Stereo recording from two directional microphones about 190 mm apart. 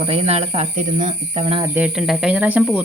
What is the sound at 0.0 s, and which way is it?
Speech, 30° right (ahead or behind).